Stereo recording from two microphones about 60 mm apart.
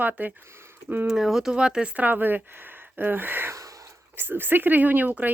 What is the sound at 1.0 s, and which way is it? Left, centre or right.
Speech, centre.